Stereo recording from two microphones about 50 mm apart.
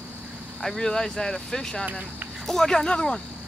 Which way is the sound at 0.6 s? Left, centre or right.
Centre.